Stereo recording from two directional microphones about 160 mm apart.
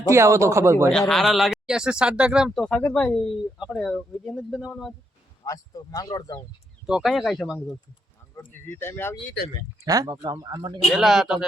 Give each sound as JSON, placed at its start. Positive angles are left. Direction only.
{"t": 0.1, "sound": "speech", "side_deg": -20}
{"t": 0.9, "sound": "speech", "side_deg": 0}
{"t": 5.5, "sound": "speech", "side_deg": 25}
{"t": 6.8, "sound": "speech", "side_deg": 0}
{"t": 8.5, "sound": "speech", "side_deg": 15}
{"t": 9.8, "sound": "speech", "side_deg": -25}
{"t": 10.8, "sound": "speech", "side_deg": 0}